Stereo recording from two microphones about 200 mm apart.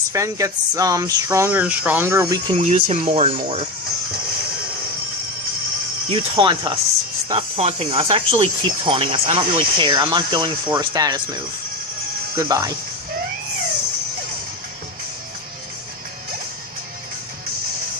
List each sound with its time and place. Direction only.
0.1 s speech: 15° right (ahead or behind)
2.6 s speech: 30° right (ahead or behind)
6.1 s speech: 25° right (ahead or behind)
12.4 s speech: 20° right (ahead or behind)